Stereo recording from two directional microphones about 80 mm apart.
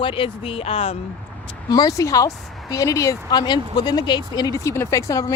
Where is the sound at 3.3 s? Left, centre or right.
Left.